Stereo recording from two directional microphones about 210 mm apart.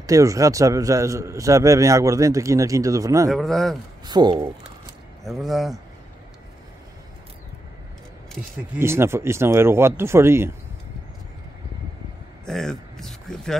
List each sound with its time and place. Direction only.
0.0 s a man's voice: 15° right (ahead or behind)
3.3 s speech: centre (ahead or behind)
4.0 s speech: 20° right (ahead or behind)
5.2 s speech: centre (ahead or behind)
8.7 s a man's voice: 10° right (ahead or behind)
12.4 s speech: centre (ahead or behind)